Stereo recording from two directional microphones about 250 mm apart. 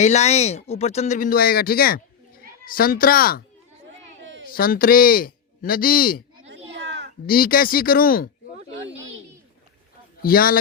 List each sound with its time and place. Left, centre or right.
0.0 s speech: left
4.2 s a sound: right
4.4 s speech: left
6.4 s a sound: right
7.3 s speech: left
10.2 s speech: left